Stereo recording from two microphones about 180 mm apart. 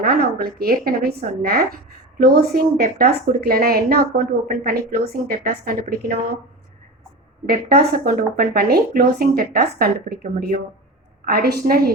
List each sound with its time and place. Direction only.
0.0 s a woman's voice: 55° right (ahead or behind)
7.4 s a woman's voice: 60° right (ahead or behind)
11.3 s a woman's voice: 60° right (ahead or behind)